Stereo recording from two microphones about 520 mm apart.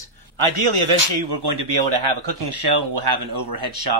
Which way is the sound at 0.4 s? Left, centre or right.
Right.